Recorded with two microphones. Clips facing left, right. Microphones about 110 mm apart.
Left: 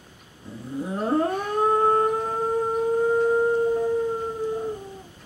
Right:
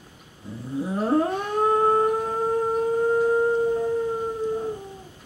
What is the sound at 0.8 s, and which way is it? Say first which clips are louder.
Howl: right 1 dB; centre (ahead or behind).